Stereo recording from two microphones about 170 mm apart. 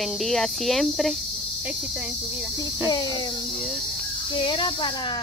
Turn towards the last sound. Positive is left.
turn(degrees=30)  # may be behind; listen again after turning